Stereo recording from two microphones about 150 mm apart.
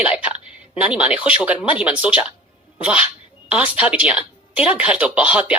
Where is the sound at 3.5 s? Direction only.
10° right (ahead or behind).